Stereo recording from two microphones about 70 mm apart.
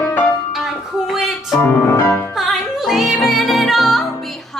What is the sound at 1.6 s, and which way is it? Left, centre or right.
Music, left.